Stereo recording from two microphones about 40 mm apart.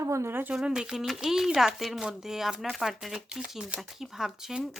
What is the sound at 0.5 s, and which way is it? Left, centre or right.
Speech, centre.